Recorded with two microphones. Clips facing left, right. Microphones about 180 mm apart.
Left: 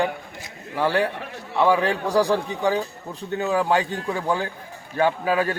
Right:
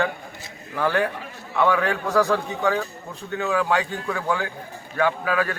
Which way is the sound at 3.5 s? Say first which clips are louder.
Left 1 dB; 35° left (ahead or behind).